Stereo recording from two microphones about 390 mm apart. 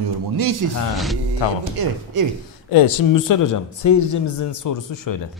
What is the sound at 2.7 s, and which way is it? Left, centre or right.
Speech, left.